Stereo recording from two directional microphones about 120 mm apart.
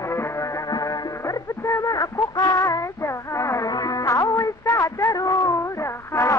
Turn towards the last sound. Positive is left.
turn(degrees=25)  # may be behind; listen again after turning